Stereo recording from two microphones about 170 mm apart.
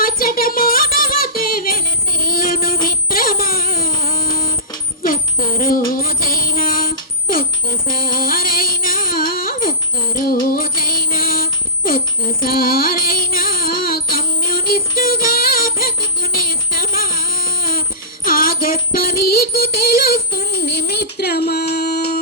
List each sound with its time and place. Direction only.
0.0 s music: 60° left (ahead or behind)
2.2 s a sound: 55° left (ahead or behind)
6.0 s music: 55° left (ahead or behind)
8.0 s music: 60° left (ahead or behind)
12.5 s music: 60° left (ahead or behind)
16.7 s a sound: 60° left (ahead or behind)
20.0 s child singing: 65° left (ahead or behind)